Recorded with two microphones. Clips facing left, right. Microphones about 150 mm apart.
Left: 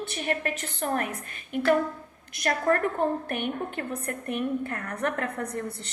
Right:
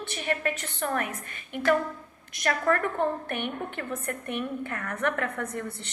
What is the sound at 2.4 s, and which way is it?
A woman's voice, 35° left (ahead or behind).